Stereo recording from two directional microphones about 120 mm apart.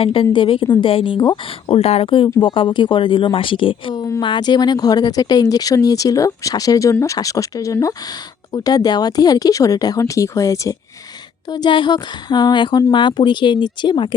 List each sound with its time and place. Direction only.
0.0 s speech: 50° left (ahead or behind)
1.7 s speech: 55° left (ahead or behind); by 10.8 s 25° left (ahead or behind)
11.5 s speech: 40° left (ahead or behind)